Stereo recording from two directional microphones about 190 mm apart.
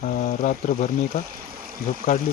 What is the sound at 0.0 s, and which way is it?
Speech, 40° left (ahead or behind).